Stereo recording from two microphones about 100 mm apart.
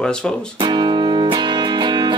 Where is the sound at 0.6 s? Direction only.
50° right (ahead or behind).